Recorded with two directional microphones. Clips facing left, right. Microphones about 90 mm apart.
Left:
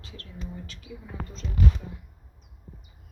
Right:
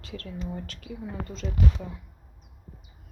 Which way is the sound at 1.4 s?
85° right.